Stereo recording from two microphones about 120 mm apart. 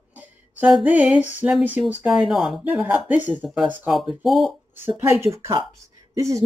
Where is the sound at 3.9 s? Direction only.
Centre (ahead or behind).